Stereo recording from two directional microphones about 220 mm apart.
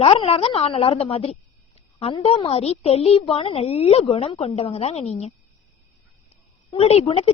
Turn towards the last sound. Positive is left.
turn(degrees=25)  # may be behind; listen again after turning